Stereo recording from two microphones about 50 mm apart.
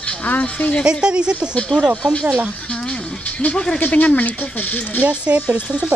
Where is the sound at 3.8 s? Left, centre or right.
Left.